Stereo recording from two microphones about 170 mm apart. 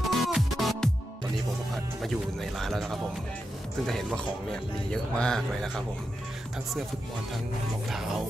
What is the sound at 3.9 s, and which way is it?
Speech, 5° left (ahead or behind).